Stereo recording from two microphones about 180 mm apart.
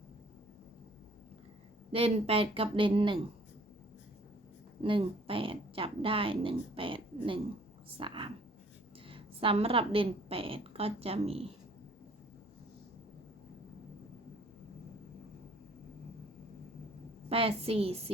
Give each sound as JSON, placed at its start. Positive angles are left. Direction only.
{"t": 1.9, "sound": "a woman's voice", "side_deg": -30}
{"t": 4.8, "sound": "a woman's voice", "side_deg": -30}
{"t": 17.2, "sound": "a woman's voice", "side_deg": -30}